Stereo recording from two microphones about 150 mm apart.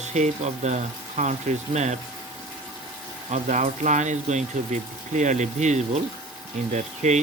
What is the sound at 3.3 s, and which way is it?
Speech, 55° right (ahead or behind).